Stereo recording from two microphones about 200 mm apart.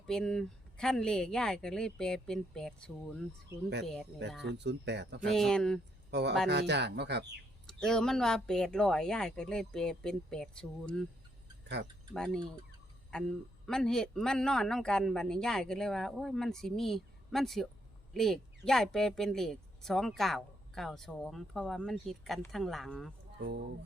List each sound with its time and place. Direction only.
0.1 s a woman's voice: 5° left (ahead or behind)
4.4 s speech: 60° right (ahead or behind)
5.3 s a woman's voice: centre (ahead or behind)
6.1 s speech: 60° right (ahead or behind)
7.7 s a woman's voice: 5° left (ahead or behind)
12.1 s a woman's voice: 5° left (ahead or behind)